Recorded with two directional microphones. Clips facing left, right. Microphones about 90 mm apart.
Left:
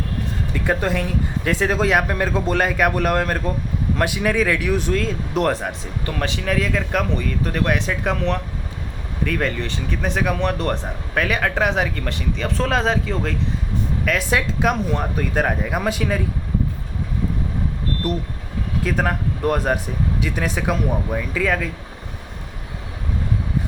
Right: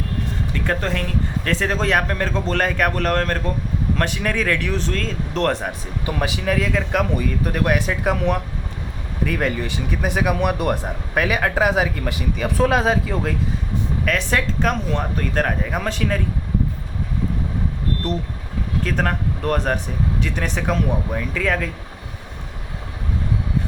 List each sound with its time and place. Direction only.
0.5 s speech: 10° left (ahead or behind)
6.1 s speech: 10° right (ahead or behind)
18.0 s speech: 5° left (ahead or behind)